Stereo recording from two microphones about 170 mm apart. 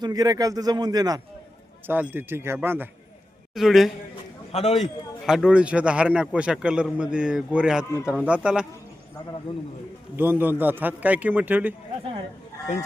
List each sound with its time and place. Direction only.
0.0 s a man's voice: 20° right (ahead or behind)
1.9 s a man's voice: 10° right (ahead or behind)
3.5 s a man's voice: centre (ahead or behind)
4.5 s a man's voice: 40° left (ahead or behind)
4.8 s a man's voice: centre (ahead or behind)
10.2 s a man's voice: 10° right (ahead or behind)